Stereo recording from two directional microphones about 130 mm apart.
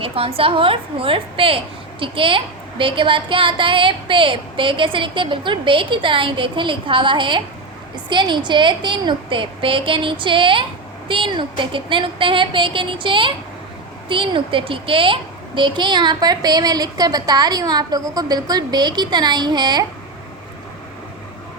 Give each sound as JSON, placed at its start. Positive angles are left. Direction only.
{"t": 0.0, "sound": "a woman's voice", "side_deg": -45}